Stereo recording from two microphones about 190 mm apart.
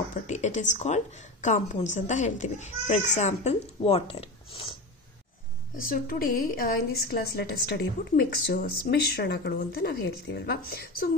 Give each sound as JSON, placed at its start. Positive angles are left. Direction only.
{"t": 0.1, "sound": "a woman's voice", "side_deg": 40}
{"t": 5.8, "sound": "a woman's voice", "side_deg": 50}